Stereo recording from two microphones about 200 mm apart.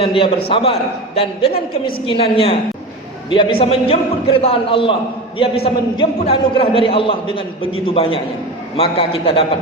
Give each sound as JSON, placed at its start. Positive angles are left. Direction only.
{"t": 0.0, "sound": "a man's voice", "side_deg": 25}